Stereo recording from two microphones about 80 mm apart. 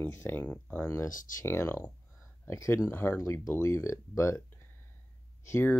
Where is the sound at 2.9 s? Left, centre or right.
Left.